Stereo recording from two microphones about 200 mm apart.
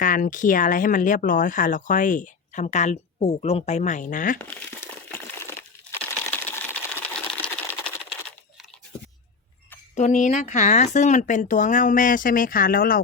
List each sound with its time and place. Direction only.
0.0 s speech: 40° left (ahead or behind)
4.4 s crumpling: 10° left (ahead or behind)
9.9 s speech: 35° left (ahead or behind)